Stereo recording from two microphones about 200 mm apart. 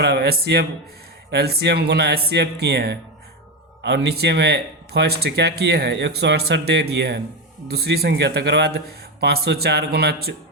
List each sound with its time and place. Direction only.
0.0 s speech: 55° right (ahead or behind)